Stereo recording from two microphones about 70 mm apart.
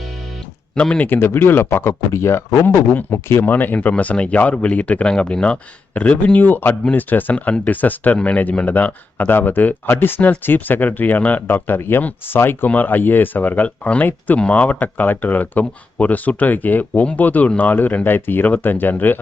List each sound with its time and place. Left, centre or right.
0.8 s speech: centre; by 3.4 s left
3.4 s speech: left